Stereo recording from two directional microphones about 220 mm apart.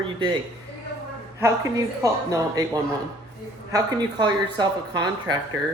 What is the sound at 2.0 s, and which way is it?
Speech, 15° right (ahead or behind).